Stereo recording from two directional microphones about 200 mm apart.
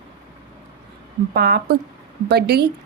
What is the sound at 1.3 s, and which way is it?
A woman's voice, 55° right (ahead or behind).